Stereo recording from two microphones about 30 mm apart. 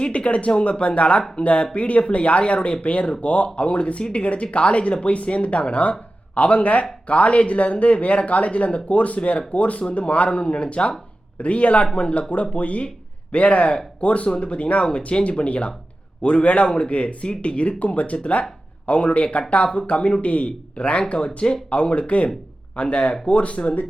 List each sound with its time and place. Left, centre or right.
0.1 s speech: left
10.2 s speech: left
12.3 s speech: left
14.3 s speech: left
21.7 s speech: left